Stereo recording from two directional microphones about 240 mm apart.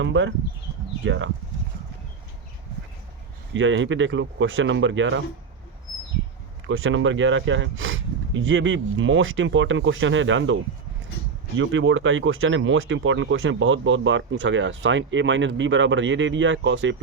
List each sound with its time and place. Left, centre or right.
0.0 s speech: right
3.5 s speech: right
6.7 s speech: right